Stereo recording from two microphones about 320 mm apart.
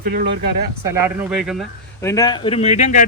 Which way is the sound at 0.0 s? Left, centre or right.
Right.